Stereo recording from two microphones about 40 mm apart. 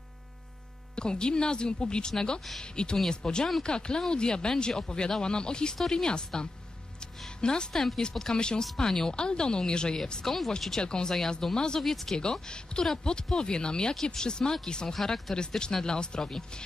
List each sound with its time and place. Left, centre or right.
0.9 s speech: left
7.7 s speech: centre
10.2 s speech: centre
10.8 s speech: left
11.8 s speech: centre
12.2 s speech: left
15.0 s speech: centre
15.3 s speech: left